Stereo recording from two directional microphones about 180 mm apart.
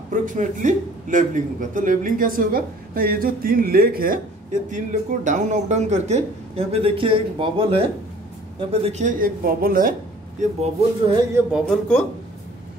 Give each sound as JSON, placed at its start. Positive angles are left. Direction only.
{"t": 0.1, "sound": "a man's voice", "side_deg": -45}
{"t": 10.4, "sound": "speech", "side_deg": -40}
{"t": 11.3, "sound": "speech", "side_deg": -5}